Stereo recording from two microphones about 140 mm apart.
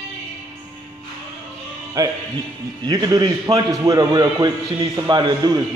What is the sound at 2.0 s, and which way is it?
A man's voice, 25° right (ahead or behind).